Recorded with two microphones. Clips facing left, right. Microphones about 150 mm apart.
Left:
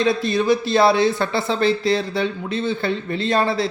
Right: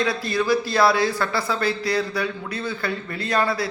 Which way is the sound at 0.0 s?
20° left (ahead or behind).